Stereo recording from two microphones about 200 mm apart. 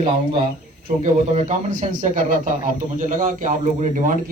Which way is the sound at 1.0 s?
35° right (ahead or behind).